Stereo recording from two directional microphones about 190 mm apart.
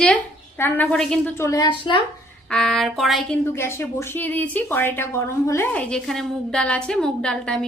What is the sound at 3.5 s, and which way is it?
A woman's voice, 15° left (ahead or behind).